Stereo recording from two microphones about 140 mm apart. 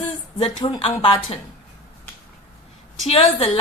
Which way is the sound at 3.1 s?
40° left (ahead or behind).